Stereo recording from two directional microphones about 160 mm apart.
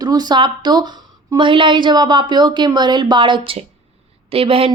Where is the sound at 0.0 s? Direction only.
25° right (ahead or behind).